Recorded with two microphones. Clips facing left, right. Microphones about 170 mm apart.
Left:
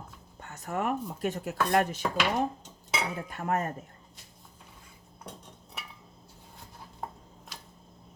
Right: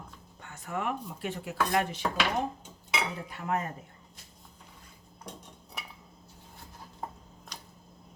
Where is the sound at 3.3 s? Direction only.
50° left (ahead or behind).